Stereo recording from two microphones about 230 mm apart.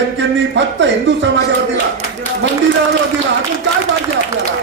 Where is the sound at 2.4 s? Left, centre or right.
Right.